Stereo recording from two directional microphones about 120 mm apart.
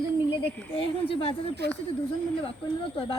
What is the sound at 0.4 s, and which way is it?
Speech, 50° left (ahead or behind).